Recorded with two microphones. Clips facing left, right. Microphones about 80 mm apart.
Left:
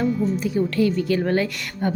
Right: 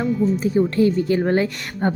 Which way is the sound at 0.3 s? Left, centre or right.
Right.